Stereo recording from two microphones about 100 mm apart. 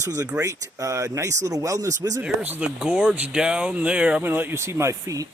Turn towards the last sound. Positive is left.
turn(degrees=-35)  # may be behind; listen again after turning